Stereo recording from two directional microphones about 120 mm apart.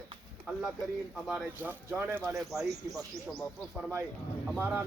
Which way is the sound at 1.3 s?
10° right (ahead or behind).